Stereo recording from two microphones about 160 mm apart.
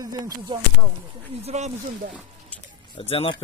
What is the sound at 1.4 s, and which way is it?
Speech, 45° right (ahead or behind).